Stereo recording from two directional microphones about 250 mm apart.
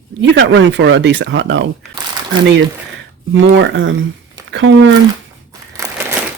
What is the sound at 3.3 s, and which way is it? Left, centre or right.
Speech, right.